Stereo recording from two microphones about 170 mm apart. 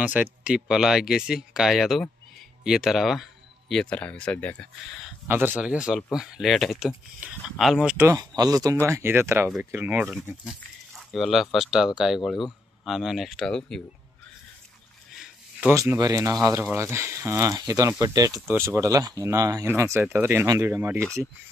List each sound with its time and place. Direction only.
0.0 s speech: 10° right (ahead or behind); by 4.6 s 10° left (ahead or behind)
5.3 s speech: 10° right (ahead or behind)
8.4 s speech: 20° right (ahead or behind); by 13.8 s 5° left (ahead or behind)
15.7 s speech: 20° right (ahead or behind)